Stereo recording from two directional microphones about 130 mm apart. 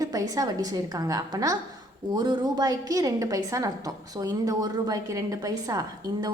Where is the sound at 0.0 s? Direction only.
30° right (ahead or behind).